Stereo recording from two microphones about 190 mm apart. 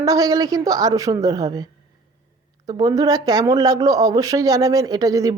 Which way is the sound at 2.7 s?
20° right (ahead or behind).